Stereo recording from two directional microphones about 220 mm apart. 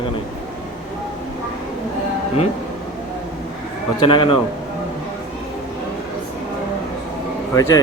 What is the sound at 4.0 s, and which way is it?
Speech, 20° left (ahead or behind).